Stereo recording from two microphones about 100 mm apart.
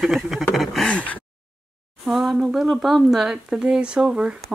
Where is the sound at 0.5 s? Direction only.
Centre (ahead or behind).